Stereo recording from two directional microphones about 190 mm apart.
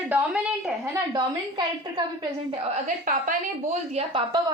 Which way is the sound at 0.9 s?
20° right (ahead or behind).